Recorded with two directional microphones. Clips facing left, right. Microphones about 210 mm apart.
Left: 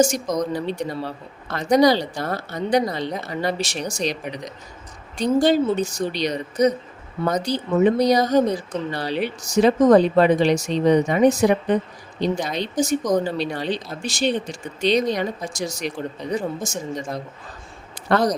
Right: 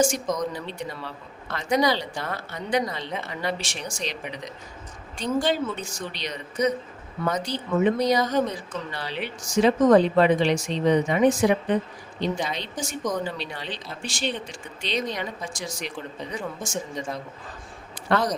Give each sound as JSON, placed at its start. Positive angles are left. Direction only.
{"t": 0.0, "sound": "speech", "side_deg": 40}
{"t": 18.1, "sound": "speech", "side_deg": 40}